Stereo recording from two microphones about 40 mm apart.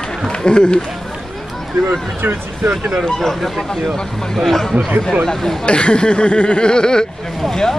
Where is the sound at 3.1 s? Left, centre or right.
Centre.